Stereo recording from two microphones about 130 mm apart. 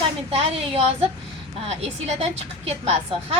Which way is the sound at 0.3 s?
45° right (ahead or behind).